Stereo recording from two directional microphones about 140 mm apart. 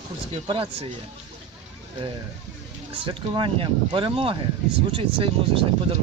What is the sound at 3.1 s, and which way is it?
Speech, 40° right (ahead or behind).